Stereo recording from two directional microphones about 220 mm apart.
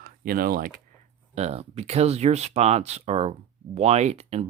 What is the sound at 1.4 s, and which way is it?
Speech, 30° right (ahead or behind).